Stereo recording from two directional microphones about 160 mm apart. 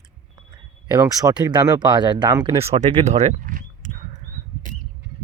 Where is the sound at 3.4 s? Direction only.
55° right (ahead or behind).